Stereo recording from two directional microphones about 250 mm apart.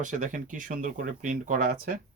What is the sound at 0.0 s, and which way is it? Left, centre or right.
Speech, right.